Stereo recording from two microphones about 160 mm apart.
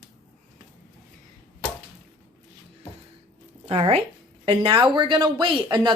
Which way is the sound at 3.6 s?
35° right (ahead or behind).